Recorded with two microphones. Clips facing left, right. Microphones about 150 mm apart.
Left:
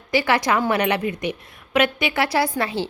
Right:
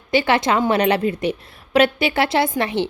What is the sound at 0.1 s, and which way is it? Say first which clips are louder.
A woman's voice: right 2 dB; 25° right (ahead or behind).